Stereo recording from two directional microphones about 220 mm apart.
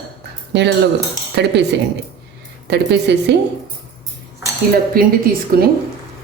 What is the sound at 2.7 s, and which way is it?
Speech, 50° right (ahead or behind).